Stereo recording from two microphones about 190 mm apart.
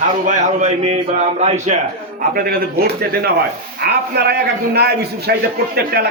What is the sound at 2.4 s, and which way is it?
A man's voice, 50° right (ahead or behind).